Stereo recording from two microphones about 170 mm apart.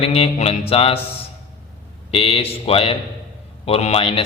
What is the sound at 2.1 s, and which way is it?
A man's voice, 35° left (ahead or behind).